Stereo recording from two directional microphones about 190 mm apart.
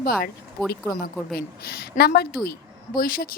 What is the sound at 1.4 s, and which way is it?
Speech, 55° left (ahead or behind).